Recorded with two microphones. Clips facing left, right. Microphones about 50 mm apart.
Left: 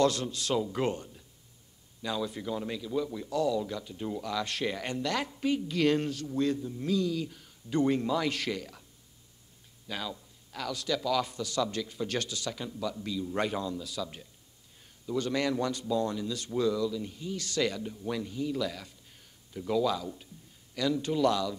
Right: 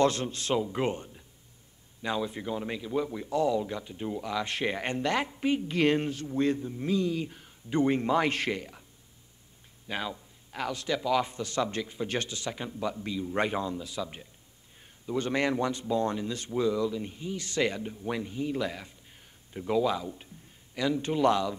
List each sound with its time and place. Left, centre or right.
0.0 s a man's voice: right
9.8 s a man's voice: right